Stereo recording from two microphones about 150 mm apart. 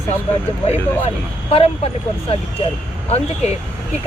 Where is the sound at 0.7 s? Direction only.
40° left (ahead or behind).